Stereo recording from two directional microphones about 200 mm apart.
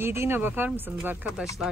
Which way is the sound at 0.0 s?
10° right (ahead or behind).